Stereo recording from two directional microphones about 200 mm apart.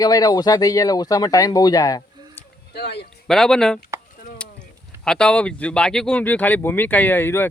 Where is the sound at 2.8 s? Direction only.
55° left (ahead or behind).